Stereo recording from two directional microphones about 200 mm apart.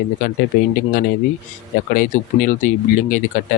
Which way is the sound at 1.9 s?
40° left (ahead or behind).